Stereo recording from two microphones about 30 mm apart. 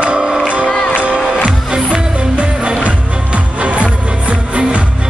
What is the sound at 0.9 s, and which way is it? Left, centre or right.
Music, right.